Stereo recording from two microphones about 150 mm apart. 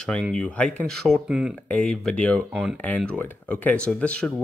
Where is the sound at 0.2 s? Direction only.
5° left (ahead or behind).